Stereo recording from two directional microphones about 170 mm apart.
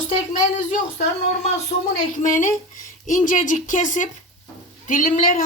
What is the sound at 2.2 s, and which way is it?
A woman's voice, 50° left (ahead or behind).